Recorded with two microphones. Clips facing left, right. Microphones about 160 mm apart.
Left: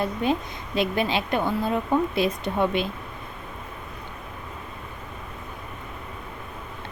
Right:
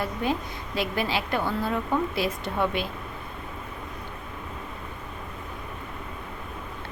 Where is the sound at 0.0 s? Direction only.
20° left (ahead or behind).